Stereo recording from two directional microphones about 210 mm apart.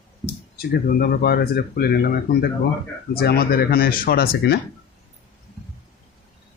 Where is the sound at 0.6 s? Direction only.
50° left (ahead or behind).